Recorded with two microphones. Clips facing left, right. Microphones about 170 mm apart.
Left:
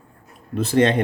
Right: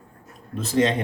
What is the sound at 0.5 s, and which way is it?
Speech, 60° left (ahead or behind).